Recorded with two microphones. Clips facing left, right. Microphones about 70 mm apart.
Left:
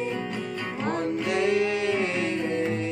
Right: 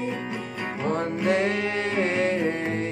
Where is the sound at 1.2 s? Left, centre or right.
Right.